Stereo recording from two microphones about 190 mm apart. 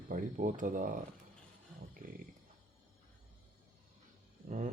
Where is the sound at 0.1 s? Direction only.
45° right (ahead or behind).